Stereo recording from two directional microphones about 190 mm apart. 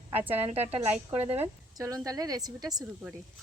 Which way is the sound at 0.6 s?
10° right (ahead or behind).